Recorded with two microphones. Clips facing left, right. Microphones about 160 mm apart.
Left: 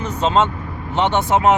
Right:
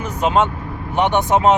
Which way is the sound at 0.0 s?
10° right (ahead or behind).